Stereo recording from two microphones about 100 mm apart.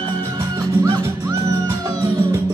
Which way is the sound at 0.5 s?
40° right (ahead or behind).